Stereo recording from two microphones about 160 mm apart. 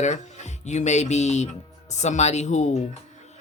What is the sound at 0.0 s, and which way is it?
Speech, 50° left (ahead or behind).